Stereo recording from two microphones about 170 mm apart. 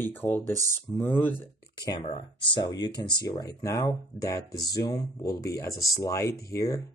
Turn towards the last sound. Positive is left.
turn(degrees=20)  # may be behind; listen again after turning